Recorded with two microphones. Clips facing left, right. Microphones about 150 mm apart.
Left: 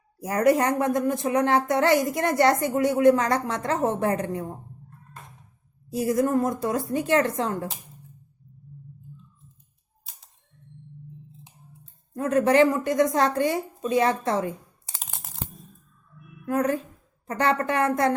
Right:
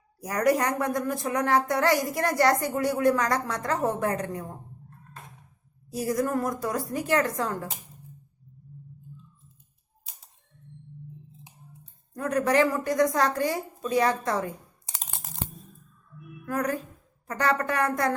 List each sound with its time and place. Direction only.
0.2 s a woman's voice: 25° left (ahead or behind)
5.9 s a woman's voice: 25° left (ahead or behind)
12.1 s a woman's voice: 25° left (ahead or behind)
16.5 s a woman's voice: 25° left (ahead or behind)